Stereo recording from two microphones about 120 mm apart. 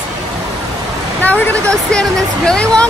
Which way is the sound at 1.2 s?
10° left (ahead or behind).